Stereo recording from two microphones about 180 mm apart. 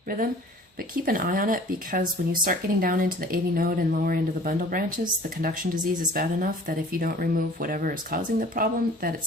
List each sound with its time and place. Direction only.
1.0 s speech: 50° right (ahead or behind)